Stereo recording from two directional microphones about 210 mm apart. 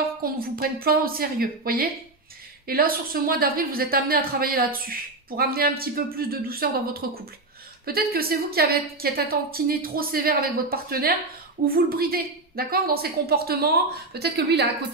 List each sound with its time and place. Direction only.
0.2 s a woman's voice: 45° right (ahead or behind)